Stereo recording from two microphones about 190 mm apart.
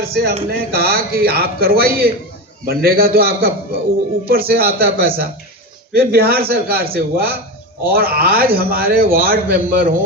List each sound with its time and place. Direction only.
0.0 s a man's voice: 55° right (ahead or behind)